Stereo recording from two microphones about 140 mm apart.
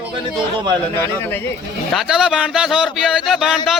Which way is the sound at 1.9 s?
5° right (ahead or behind).